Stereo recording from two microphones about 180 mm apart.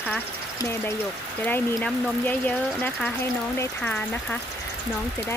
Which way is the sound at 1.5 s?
10° left (ahead or behind).